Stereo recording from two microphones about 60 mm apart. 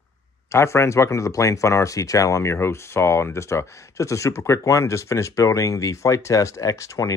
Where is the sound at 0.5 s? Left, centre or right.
Left.